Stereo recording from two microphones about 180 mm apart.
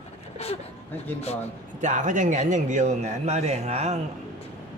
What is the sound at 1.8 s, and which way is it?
A man's voice, 45° right (ahead or behind).